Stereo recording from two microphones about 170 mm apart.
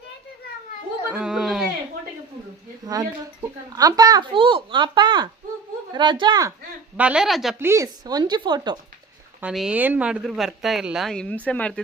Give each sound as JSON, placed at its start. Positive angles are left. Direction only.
{"t": 1.1, "sound": "a sound", "side_deg": -5}
{"t": 2.8, "sound": "a child's voice", "side_deg": -20}
{"t": 6.9, "sound": "speech", "side_deg": -5}
{"t": 7.6, "sound": "a child's voice", "side_deg": -15}
{"t": 9.4, "sound": "speech", "side_deg": -5}